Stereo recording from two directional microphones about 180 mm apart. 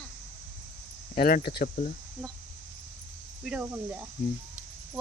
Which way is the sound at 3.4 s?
5° right (ahead or behind).